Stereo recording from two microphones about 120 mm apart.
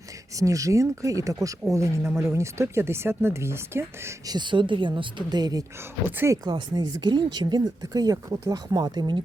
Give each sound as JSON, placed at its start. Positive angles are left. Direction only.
{"t": 0.3, "sound": "speech", "side_deg": -25}
{"t": 4.3, "sound": "speech", "side_deg": -40}
{"t": 6.4, "sound": "speech", "side_deg": -35}